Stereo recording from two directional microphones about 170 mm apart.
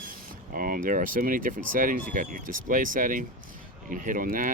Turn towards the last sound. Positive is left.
turn(degrees=-55)  # may be behind; listen again after turning